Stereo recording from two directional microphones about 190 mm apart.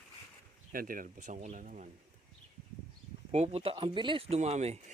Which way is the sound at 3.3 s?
35° right (ahead or behind).